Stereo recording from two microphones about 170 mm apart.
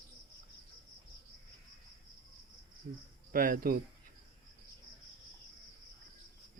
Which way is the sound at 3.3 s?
55° right (ahead or behind).